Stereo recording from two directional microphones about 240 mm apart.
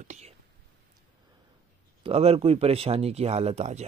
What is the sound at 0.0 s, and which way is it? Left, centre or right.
Whispering, right.